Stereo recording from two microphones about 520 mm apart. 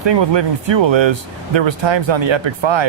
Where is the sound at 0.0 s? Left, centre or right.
Right.